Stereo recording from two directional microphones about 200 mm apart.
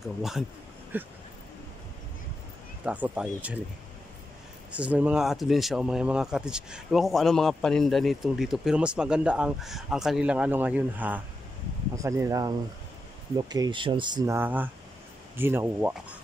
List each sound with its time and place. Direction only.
0.0 s speech: centre (ahead or behind)
2.8 s speech: 5° right (ahead or behind)
4.7 s speech: 5° right (ahead or behind)